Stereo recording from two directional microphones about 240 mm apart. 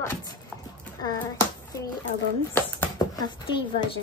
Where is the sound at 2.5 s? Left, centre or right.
Centre.